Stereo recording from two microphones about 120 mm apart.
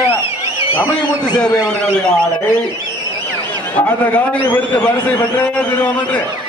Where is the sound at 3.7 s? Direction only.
15° left (ahead or behind).